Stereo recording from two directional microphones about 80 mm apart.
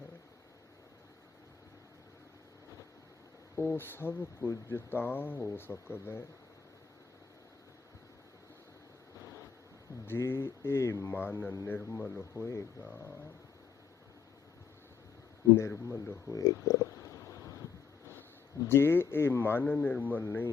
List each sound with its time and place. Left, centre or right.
3.5 s speech: left
9.1 s vehicle: left
10.1 s speech: left
12.4 s speech: left
15.5 s speech: left
16.3 s a sound: left
18.6 s speech: left